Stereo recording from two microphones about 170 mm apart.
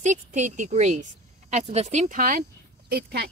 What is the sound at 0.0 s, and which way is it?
Speech, 45° right (ahead or behind).